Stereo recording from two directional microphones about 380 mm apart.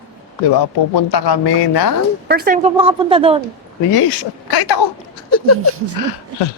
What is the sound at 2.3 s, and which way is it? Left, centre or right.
A woman's voice, right.